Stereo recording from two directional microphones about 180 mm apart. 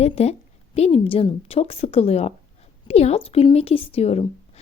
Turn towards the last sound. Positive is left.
turn(degrees=35)  # may be behind; listen again after turning